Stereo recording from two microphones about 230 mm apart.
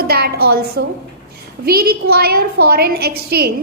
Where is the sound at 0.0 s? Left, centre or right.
Right.